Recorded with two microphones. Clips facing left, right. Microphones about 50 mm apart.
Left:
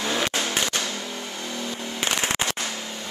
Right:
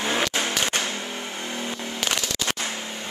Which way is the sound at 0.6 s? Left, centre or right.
Right.